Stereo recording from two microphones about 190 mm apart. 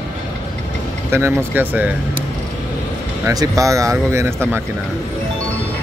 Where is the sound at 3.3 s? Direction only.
15° right (ahead or behind).